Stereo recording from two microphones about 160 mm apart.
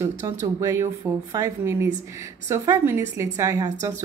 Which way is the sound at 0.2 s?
20° right (ahead or behind).